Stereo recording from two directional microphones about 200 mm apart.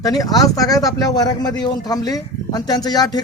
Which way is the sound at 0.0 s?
20° left (ahead or behind).